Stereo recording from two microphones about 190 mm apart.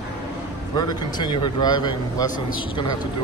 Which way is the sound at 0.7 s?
20° left (ahead or behind).